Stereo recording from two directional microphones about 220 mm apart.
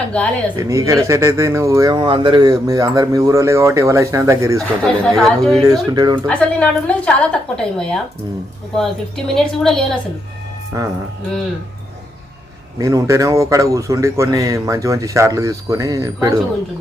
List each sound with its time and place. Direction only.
0.1 s a woman's voice: 5° left (ahead or behind)
0.5 s speech: 15° right (ahead or behind)
4.8 s a woman's voice: centre (ahead or behind)
5.6 s speech: 15° right (ahead or behind)
6.2 s a woman's voice: 5° left (ahead or behind)
9.3 s a woman's voice: 5° left (ahead or behind)
10.7 s speech: 15° right (ahead or behind)
12.8 s speech: 15° right (ahead or behind)